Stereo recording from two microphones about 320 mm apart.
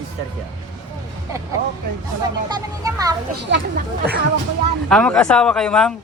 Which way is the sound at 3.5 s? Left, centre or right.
Right.